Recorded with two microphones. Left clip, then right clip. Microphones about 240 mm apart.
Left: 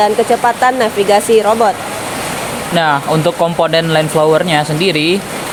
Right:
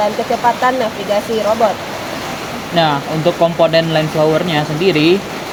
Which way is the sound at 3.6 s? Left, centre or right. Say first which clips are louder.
Left 1 dB; left.